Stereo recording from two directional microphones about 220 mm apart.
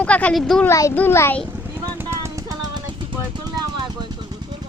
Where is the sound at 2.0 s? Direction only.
10° right (ahead or behind).